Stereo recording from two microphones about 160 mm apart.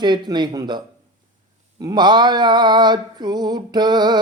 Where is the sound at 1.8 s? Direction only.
25° right (ahead or behind).